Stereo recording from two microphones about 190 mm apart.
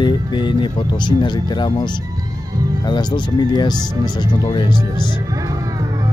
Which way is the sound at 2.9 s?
20° left (ahead or behind).